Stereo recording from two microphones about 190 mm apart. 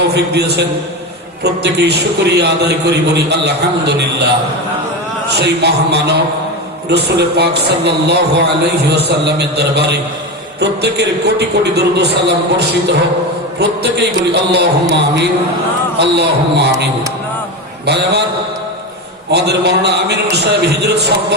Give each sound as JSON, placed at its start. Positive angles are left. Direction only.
{"t": 0.3, "sound": "a man's voice", "side_deg": -60}
{"t": 5.4, "sound": "a man's voice", "side_deg": -60}
{"t": 17.8, "sound": "a man's voice", "side_deg": -60}
{"t": 19.3, "sound": "a man's voice", "side_deg": -60}